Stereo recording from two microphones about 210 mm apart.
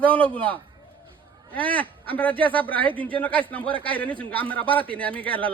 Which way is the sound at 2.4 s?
5° left (ahead or behind).